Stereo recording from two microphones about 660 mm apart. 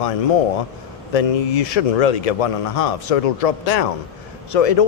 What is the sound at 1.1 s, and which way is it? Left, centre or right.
Speech, left.